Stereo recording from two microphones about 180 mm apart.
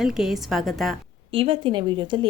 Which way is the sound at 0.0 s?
5° right (ahead or behind).